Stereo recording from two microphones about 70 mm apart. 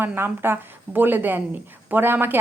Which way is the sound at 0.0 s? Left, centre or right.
Right.